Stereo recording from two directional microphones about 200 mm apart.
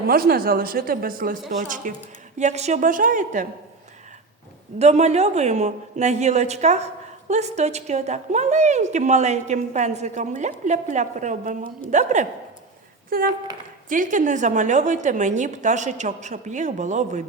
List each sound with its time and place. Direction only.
0.1 s a woman's voice: 50° right (ahead or behind)
4.8 s a woman's voice: 35° right (ahead or behind)